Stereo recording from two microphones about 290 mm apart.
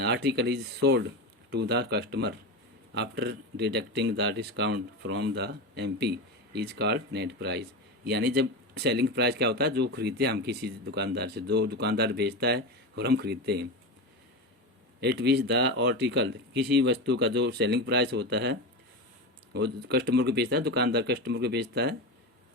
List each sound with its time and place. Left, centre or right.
0.0 s speech: right
15.0 s speech: right
19.5 s speech: right